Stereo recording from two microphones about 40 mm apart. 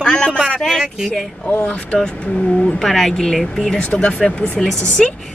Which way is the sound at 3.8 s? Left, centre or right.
Left.